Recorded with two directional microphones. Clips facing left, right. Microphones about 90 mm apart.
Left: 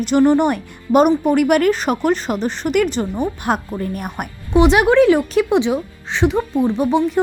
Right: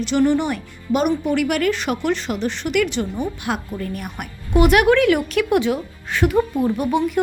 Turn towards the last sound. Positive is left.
turn(degrees=25)  # may be behind; listen again after turning